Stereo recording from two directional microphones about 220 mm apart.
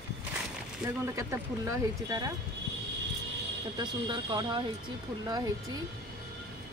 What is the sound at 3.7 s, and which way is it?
Speech, 20° right (ahead or behind).